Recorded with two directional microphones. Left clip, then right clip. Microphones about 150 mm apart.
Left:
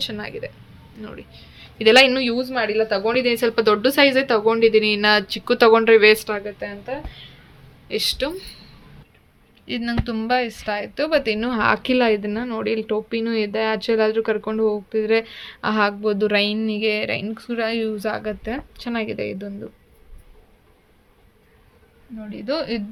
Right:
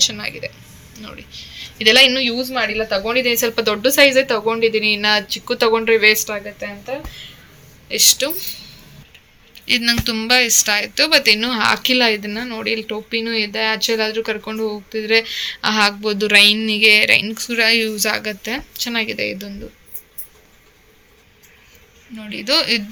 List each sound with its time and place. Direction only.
0.0 s a woman's voice: 55° left (ahead or behind)
7.9 s speech: 50° left (ahead or behind)
9.6 s speech: 30° left (ahead or behind); by 19.5 s 50° left (ahead or behind)
22.2 s speech: 35° left (ahead or behind)